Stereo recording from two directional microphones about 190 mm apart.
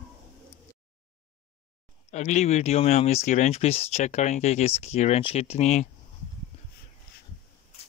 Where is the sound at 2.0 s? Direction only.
35° left (ahead or behind).